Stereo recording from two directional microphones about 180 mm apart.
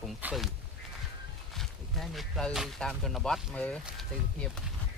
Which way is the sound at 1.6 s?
Centre (ahead or behind).